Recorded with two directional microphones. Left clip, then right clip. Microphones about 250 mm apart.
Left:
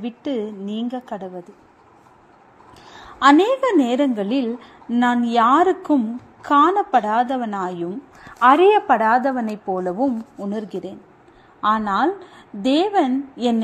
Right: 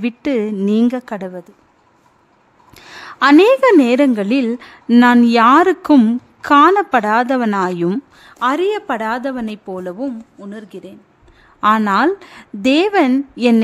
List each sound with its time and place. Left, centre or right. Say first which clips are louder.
0.0 s a woman's voice: right 7 dB; right
2.7 s a sound: right 7 dB; right
3.4 s a woman's voice: right 8 dB; right
9.7 s speech: left 5 dB; centre
11.6 s a woman's voice: right 5 dB; right